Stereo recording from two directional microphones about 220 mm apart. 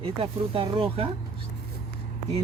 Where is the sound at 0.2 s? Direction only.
25° right (ahead or behind).